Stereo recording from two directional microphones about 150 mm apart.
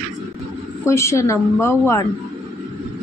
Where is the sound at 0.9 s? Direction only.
20° left (ahead or behind).